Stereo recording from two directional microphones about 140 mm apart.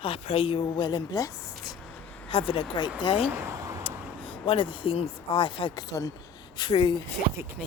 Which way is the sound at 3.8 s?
40° left (ahead or behind).